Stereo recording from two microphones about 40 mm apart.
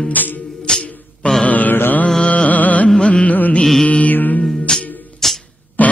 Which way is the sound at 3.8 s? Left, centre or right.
Left.